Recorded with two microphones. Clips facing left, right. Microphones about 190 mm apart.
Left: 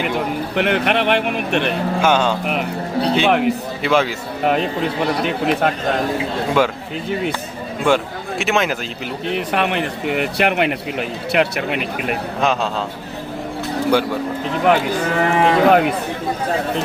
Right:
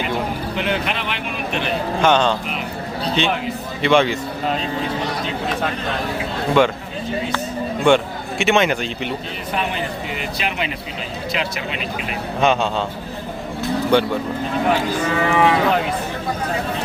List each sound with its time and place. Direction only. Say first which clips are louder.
0.5 s speech: left 7 dB; 65° left (ahead or behind)
2.0 s speech: right 1 dB; 10° left (ahead or behind)
2.5 s speech: left 5 dB; 65° left (ahead or behind)
3.8 s speech: right 2 dB; 5° left (ahead or behind)
5.2 s speech: left 5 dB; 60° left (ahead or behind)
6.6 s speech: right 2 dB; 5° left (ahead or behind)
7.9 s a man's voice: right 2 dB; centre (ahead or behind)
9.3 s speech: left 5 dB; 70° left (ahead or behind)
14.6 s speech: left 4 dB; 65° left (ahead or behind)
15.2 s speech: left 3 dB; 45° left (ahead or behind)